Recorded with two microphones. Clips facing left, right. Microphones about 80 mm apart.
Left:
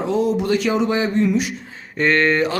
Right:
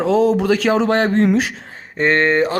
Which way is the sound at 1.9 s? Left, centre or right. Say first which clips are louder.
Right 2 dB; right.